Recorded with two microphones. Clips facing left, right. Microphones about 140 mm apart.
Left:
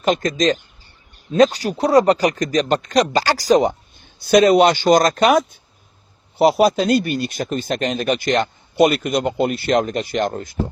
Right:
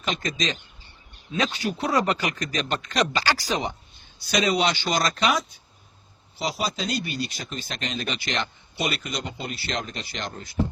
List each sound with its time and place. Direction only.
0.0 s speech: 45° left (ahead or behind)